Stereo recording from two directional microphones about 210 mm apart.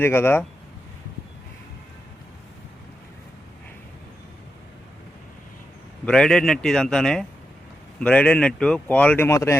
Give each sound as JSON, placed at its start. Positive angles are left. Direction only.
{"t": 0.0, "sound": "speech", "side_deg": 10}
{"t": 6.1, "sound": "a man's voice", "side_deg": 5}